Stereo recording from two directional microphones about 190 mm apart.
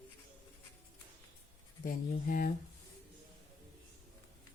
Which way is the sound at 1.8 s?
50° left (ahead or behind).